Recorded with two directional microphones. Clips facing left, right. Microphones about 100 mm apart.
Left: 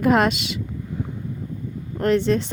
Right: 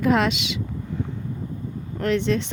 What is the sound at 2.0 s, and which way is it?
Speech, 40° left (ahead or behind).